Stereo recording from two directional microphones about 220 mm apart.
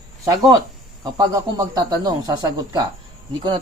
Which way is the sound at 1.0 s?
15° right (ahead or behind).